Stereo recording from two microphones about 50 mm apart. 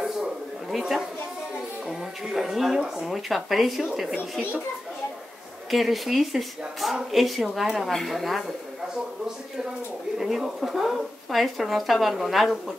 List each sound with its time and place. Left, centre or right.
0.0 s a sound: centre
1.9 s speech: centre
5.7 s speech: centre
10.1 s speech: centre